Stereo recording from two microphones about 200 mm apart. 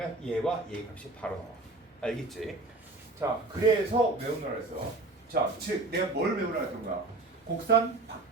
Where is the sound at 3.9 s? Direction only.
35° right (ahead or behind).